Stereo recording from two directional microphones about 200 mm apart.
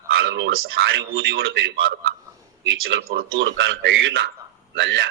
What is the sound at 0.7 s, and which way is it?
A man's voice, 65° right (ahead or behind).